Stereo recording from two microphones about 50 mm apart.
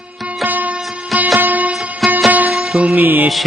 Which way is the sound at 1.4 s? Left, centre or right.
Right.